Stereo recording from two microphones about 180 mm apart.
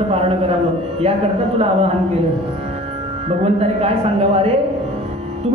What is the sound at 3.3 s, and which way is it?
A man's voice, 35° right (ahead or behind).